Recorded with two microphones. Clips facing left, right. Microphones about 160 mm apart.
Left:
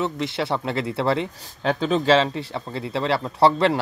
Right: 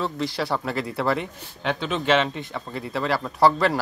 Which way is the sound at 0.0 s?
25° left (ahead or behind).